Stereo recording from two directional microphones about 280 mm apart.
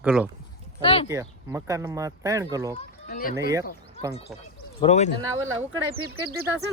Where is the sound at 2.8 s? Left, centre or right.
Left.